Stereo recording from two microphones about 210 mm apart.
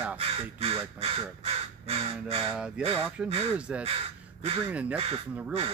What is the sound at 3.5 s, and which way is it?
A man's voice, 5° right (ahead or behind).